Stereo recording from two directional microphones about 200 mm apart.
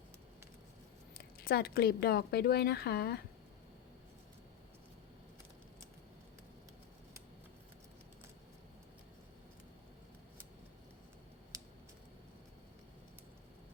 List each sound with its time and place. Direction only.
1.1 s a woman's voice: 50° left (ahead or behind)